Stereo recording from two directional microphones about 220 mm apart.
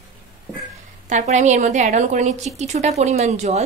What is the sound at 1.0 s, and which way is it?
A woman's voice, 35° right (ahead or behind).